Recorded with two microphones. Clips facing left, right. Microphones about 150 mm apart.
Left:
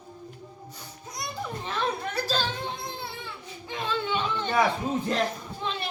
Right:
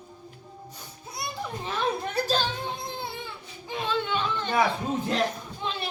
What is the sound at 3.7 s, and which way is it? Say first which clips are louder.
Chatter: right 1 dB; centre (ahead or behind).